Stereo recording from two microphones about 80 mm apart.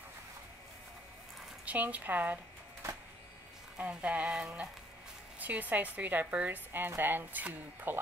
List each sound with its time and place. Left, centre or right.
1.7 s a woman's voice: centre
3.7 s a woman's voice: centre